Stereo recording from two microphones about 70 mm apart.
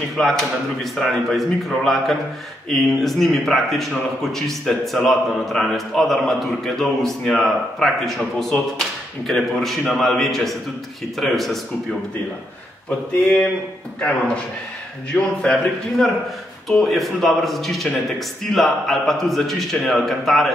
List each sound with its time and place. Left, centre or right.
0.2 s speech: centre
13.9 s a man's voice: centre